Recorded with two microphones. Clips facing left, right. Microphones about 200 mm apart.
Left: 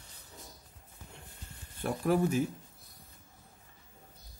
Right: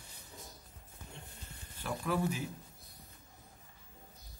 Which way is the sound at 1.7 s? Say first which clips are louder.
Left 6 dB; 50° left (ahead or behind).